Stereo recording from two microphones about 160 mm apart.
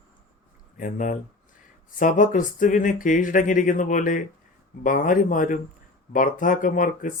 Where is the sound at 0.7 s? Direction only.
55° left (ahead or behind).